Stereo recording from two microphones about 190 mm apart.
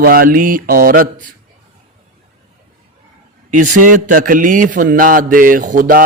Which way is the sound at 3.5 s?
45° right (ahead or behind).